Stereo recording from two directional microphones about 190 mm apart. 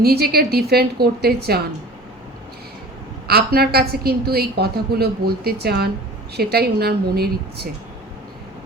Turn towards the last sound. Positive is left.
turn(degrees=-55)  # may be behind; listen again after turning